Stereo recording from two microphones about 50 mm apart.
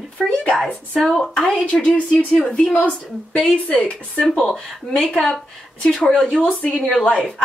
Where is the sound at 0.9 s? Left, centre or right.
Centre.